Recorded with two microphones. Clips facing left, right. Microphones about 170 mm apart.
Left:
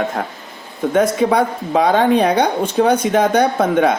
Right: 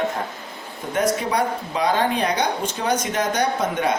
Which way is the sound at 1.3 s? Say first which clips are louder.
Left 6 dB; 55° left (ahead or behind).